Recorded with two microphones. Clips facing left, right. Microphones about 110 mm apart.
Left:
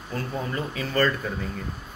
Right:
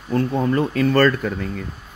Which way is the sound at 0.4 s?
60° right (ahead or behind).